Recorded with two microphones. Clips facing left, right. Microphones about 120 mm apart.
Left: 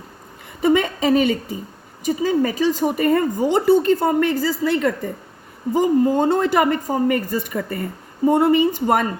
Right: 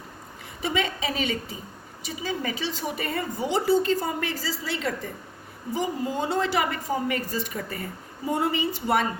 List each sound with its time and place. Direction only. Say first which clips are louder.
0.6 s speech: left 10 dB; 50° left (ahead or behind)